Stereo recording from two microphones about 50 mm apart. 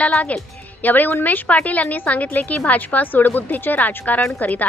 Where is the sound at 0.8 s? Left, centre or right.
Left.